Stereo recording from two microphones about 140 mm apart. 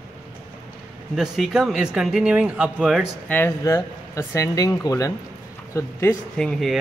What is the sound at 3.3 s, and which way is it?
Speech, 20° left (ahead or behind).